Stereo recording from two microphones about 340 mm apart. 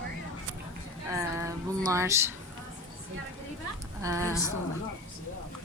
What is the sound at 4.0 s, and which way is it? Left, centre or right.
Speech, centre.